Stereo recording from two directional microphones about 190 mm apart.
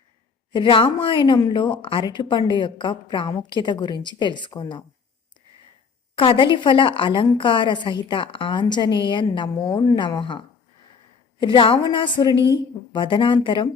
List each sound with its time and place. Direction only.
0.5 s a woman's voice: 25° left (ahead or behind)
6.1 s a woman's voice: 25° left (ahead or behind)